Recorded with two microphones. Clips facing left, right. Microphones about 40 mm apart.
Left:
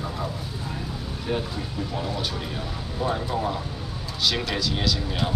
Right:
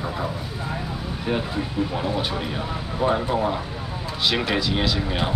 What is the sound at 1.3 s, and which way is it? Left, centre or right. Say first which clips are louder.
Speech: right 3 dB; right.